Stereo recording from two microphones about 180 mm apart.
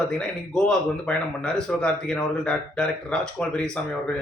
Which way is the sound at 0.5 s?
5° left (ahead or behind).